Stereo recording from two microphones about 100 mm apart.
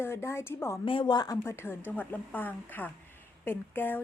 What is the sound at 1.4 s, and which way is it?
A woman's voice, 25° left (ahead or behind).